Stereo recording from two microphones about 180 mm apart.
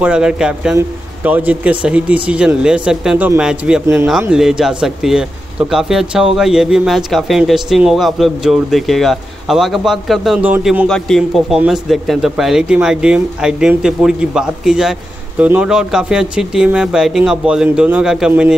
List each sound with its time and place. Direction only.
0.0 s speech: 5° right (ahead or behind)